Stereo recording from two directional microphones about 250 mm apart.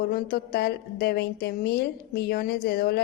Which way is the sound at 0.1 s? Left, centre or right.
Left.